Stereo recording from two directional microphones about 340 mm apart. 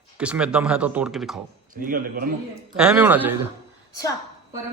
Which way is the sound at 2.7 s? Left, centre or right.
Centre.